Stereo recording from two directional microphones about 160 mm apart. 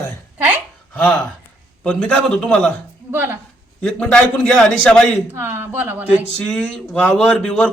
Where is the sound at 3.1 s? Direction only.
15° right (ahead or behind).